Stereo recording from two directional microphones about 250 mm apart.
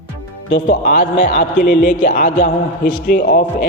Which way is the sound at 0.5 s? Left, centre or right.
Left.